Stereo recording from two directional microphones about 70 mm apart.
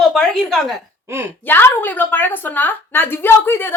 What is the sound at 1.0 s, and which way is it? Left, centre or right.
Speech, right.